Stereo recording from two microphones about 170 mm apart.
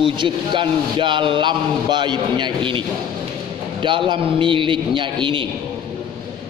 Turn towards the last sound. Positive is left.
turn(degrees=-30)  # may be behind; listen again after turning